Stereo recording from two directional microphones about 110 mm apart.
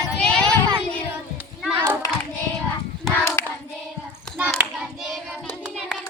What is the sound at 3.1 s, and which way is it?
Hands, 20° left (ahead or behind).